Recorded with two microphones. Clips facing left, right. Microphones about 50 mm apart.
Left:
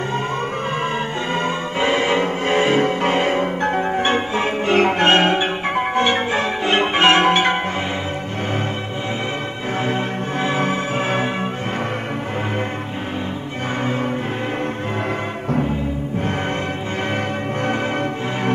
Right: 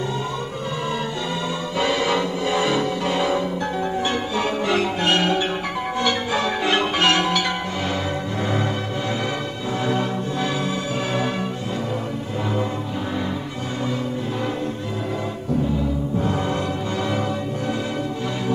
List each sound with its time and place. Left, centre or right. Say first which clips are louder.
1.8 s music: left 3 dB; left
9.8 s music: left 1 dB; left